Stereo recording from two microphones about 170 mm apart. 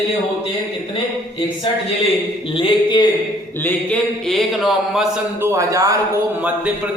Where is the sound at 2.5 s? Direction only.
30° left (ahead or behind).